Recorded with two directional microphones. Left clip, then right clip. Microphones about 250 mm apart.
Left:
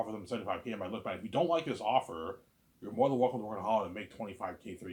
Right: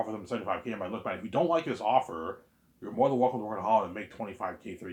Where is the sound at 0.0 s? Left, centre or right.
Centre.